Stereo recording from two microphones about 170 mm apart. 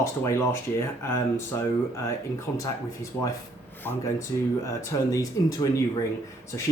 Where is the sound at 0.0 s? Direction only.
15° left (ahead or behind).